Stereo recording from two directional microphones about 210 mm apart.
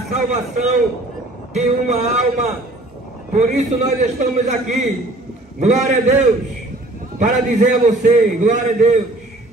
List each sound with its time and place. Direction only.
0.1 s a man's voice: 35° right (ahead or behind)
7.2 s a man's voice: 35° right (ahead or behind)